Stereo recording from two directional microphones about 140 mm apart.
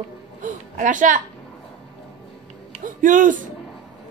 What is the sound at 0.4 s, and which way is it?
Speech, 70° right (ahead or behind).